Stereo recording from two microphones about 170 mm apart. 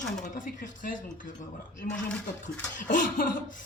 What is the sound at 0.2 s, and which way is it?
Speech, 50° left (ahead or behind).